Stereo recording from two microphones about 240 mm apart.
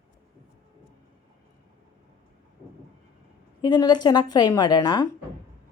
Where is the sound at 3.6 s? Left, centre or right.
Centre.